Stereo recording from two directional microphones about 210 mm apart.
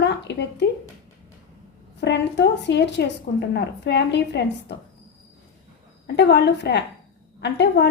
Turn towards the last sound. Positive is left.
turn(degrees=55)  # may be behind; listen again after turning